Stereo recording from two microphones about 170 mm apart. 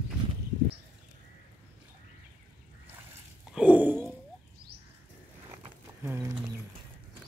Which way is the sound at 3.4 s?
5° right (ahead or behind).